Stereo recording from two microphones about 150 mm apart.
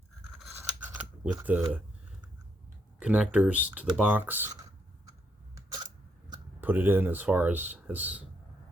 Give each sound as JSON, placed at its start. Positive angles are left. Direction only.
{"t": 0.9, "sound": "camera", "side_deg": -10}
{"t": 1.4, "sound": "speech", "side_deg": -10}
{"t": 3.0, "sound": "speech", "side_deg": -10}
{"t": 5.5, "sound": "camera", "side_deg": -25}
{"t": 6.6, "sound": "speech", "side_deg": -15}